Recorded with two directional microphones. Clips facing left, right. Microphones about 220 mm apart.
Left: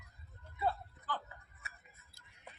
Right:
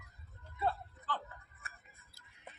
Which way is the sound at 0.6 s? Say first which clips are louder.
Even; 10° left (ahead or behind).